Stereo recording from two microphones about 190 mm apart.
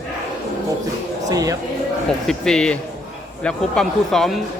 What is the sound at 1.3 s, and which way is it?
Speech, 20° right (ahead or behind).